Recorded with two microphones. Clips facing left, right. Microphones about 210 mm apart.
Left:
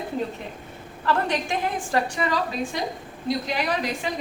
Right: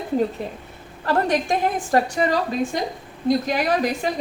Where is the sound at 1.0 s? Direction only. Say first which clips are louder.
Right 4 dB; 40° right (ahead or behind).